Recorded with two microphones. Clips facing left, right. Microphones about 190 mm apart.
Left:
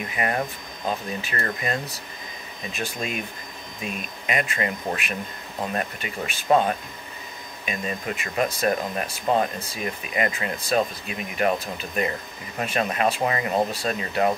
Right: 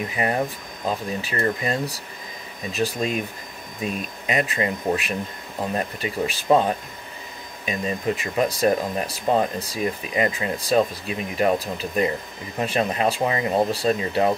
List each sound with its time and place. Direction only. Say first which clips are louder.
0.1 s speech: right 1 dB; 30° right (ahead or behind)
7.6 s speech: right 5 dB; 35° right (ahead or behind)